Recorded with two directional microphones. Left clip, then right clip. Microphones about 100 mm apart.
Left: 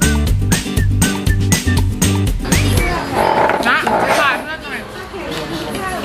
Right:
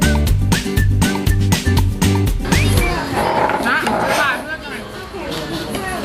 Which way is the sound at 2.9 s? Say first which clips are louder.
Left 6 dB; 20° left (ahead or behind).